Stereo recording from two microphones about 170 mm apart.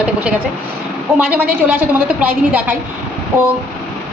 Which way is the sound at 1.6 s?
10° right (ahead or behind).